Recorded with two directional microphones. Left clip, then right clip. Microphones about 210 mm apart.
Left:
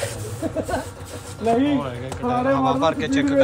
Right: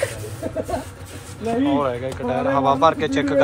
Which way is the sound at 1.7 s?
5° left (ahead or behind).